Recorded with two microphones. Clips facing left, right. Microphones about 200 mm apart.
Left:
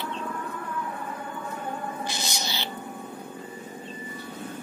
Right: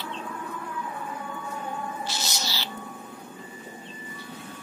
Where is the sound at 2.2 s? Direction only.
20° left (ahead or behind).